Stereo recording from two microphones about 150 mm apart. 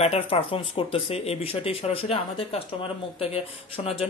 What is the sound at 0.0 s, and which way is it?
Speech, 40° left (ahead or behind).